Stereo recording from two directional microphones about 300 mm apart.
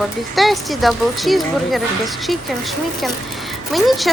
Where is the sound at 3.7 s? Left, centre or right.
Centre.